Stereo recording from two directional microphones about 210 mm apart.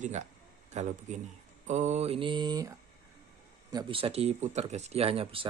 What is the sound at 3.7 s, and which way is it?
Speech, 25° right (ahead or behind).